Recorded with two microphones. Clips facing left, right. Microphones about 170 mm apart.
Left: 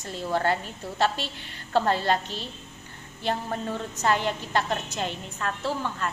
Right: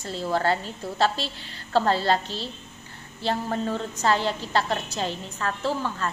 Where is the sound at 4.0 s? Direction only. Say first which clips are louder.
Right 1 dB; 35° right (ahead or behind).